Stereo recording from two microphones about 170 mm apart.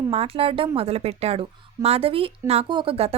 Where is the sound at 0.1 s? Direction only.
35° right (ahead or behind).